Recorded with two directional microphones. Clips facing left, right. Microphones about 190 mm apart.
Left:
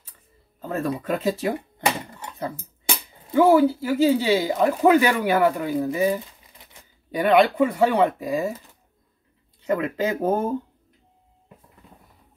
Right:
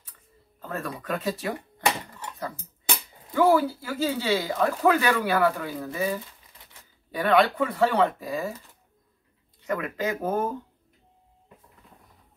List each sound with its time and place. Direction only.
0.7 s speech: 25° left (ahead or behind)
2.0 s a sound: 20° left (ahead or behind)
3.3 s speech: 20° left (ahead or behind)
9.7 s speech: 30° left (ahead or behind)